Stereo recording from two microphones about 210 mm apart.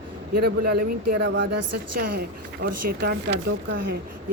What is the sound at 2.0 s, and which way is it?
Speech, 45° right (ahead or behind).